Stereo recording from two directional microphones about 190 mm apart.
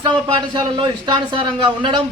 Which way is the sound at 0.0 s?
25° right (ahead or behind).